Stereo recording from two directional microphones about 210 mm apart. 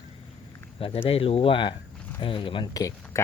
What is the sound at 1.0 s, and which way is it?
Speech, 25° left (ahead or behind).